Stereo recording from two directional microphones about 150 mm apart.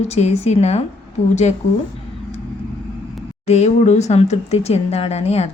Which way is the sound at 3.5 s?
50° left (ahead or behind).